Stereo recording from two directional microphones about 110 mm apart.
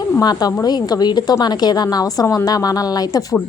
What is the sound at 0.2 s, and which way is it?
A woman's voice, 35° left (ahead or behind).